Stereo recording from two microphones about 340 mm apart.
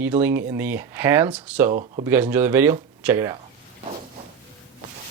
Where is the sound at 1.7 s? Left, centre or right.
Right.